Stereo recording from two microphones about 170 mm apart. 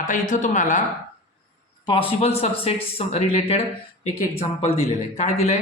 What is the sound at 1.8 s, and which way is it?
Speech, 30° left (ahead or behind).